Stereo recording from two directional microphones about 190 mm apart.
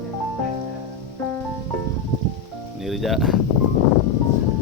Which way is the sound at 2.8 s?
Centre (ahead or behind).